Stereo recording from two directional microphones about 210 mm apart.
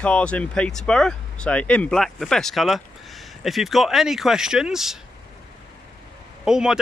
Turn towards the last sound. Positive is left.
turn(degrees=-5)  # may be behind; listen again after turning